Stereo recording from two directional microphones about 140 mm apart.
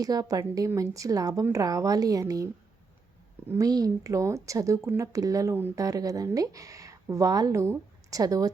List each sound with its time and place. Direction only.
0.0 s a woman's voice: 25° right (ahead or behind)
3.5 s a woman's voice: 25° right (ahead or behind)